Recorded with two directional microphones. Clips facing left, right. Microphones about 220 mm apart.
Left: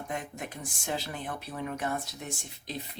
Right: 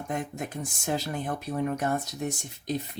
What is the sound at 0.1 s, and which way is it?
Speech, 45° right (ahead or behind).